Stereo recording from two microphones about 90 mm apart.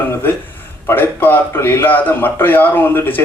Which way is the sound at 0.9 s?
20° left (ahead or behind).